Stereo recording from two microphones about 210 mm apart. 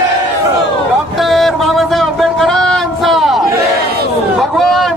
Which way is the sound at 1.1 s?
Centre (ahead or behind).